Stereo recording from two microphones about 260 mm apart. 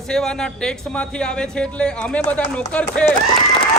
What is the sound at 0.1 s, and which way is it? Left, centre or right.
A man's voice, centre.